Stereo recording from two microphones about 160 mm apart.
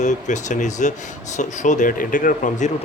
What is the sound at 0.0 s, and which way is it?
Speech, 50° left (ahead or behind).